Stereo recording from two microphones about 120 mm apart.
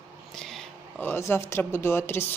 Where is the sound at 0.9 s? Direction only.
20° left (ahead or behind).